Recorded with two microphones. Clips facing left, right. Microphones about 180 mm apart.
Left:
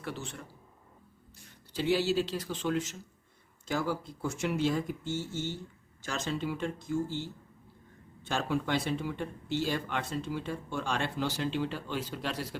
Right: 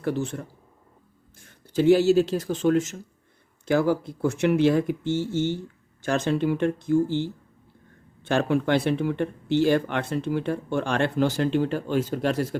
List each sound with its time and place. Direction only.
0.0 s speech: 45° right (ahead or behind)
1.7 s speech: 50° right (ahead or behind)
3.7 s speech: 65° right (ahead or behind)
6.0 s speech: 60° right (ahead or behind)
8.2 s speech: 65° right (ahead or behind)